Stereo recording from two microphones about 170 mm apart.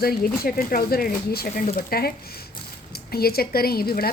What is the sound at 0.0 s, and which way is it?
A woman's voice, 60° left (ahead or behind).